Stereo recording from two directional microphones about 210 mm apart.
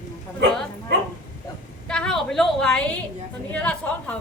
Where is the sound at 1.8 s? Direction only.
5° left (ahead or behind).